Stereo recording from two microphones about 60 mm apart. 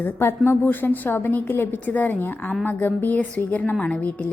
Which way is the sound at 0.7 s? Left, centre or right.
Left.